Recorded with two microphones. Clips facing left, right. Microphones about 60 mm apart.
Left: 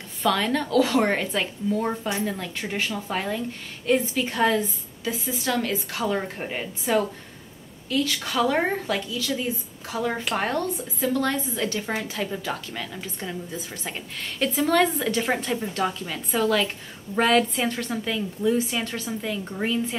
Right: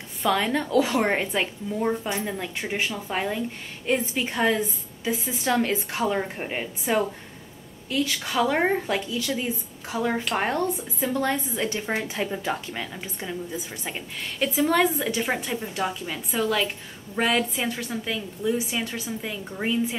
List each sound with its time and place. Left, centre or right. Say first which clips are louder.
0.2 s a woman's voice: even; centre
6.1 s a woman's voice: even; centre
9.9 s a woman's voice: right 1 dB; centre
12.9 s a woman's voice: even; centre